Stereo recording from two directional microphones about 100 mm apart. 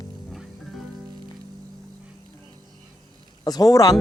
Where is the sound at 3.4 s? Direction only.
40° left (ahead or behind).